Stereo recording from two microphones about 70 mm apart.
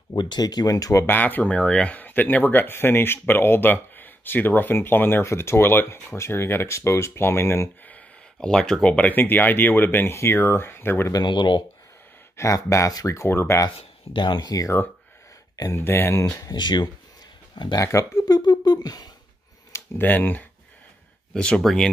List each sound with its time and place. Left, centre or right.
0.1 s speech: left
1.0 s speech: left
1.4 s speech: centre; by 7.7 s left
8.4 s speech: centre
8.8 s speech: left
11.1 s speech: left
12.4 s speech: left
13.3 s speech: left
14.1 s speech: left
15.7 s speech: left
16.3 s speech: left
18.2 s a sound: left
20.0 s speech: left
21.3 s speech: centre